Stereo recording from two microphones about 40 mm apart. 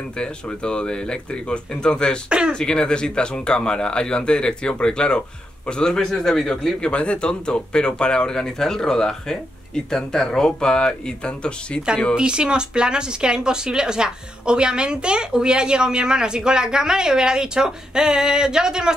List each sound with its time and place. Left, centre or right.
0.2 s speech: left
2.2 s speech: right
2.5 s speech: left
6.8 s speech: left
12.2 s speech: right